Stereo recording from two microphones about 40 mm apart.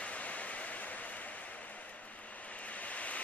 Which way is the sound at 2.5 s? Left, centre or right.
Left.